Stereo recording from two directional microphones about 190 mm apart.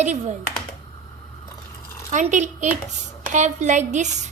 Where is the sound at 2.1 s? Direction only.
40° right (ahead or behind).